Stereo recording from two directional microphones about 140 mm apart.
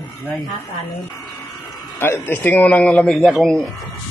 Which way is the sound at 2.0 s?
15° left (ahead or behind).